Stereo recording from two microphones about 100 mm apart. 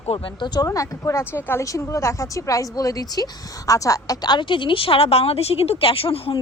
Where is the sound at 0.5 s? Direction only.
35° left (ahead or behind).